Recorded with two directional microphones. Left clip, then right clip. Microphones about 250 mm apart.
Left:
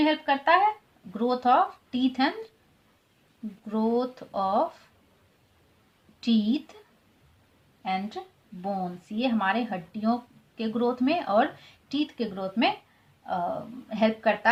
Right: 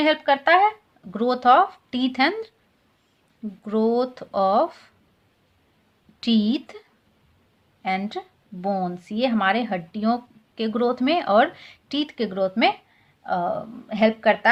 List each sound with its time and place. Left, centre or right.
0.0 s speech: right
3.6 s speech: right
6.1 s a woman's voice: right
13.9 s speech: right